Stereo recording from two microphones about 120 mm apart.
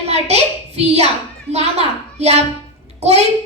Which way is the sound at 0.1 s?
65° right (ahead or behind).